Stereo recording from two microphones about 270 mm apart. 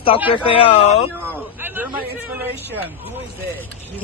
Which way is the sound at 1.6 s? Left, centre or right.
Centre.